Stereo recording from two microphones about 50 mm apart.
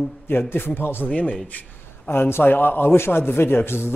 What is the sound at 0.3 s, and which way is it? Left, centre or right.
Speech, left.